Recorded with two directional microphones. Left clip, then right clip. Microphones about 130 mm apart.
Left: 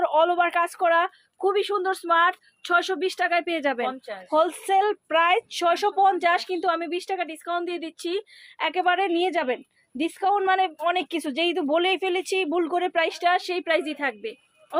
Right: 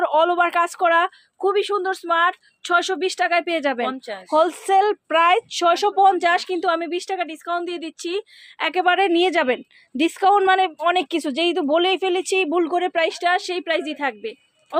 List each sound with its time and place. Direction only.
0.0 s speech: 30° right (ahead or behind); by 8.2 s 15° right (ahead or behind)
8.5 s speech: 40° right (ahead or behind); by 14.8 s 20° right (ahead or behind)